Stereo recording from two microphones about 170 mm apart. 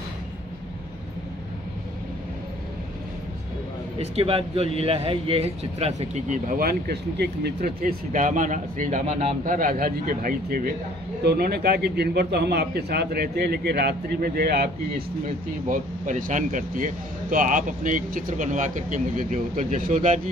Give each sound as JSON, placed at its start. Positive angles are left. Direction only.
{"t": 4.0, "sound": "speech", "side_deg": -35}
{"t": 9.4, "sound": "a man's voice", "side_deg": -55}
{"t": 15.7, "sound": "speech", "side_deg": -50}